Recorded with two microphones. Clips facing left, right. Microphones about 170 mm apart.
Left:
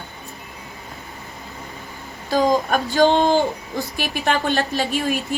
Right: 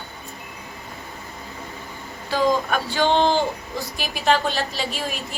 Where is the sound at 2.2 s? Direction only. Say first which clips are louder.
Left 3 dB; 45° left (ahead or behind).